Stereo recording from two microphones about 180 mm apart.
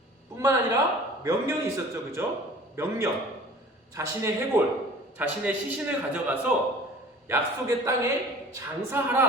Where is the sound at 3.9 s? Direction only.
15° right (ahead or behind).